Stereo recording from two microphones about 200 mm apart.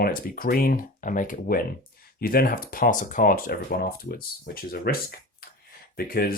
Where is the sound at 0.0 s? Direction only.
45° left (ahead or behind).